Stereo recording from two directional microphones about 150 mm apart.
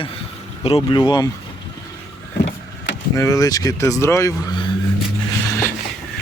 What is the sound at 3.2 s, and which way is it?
Speech, 20° left (ahead or behind).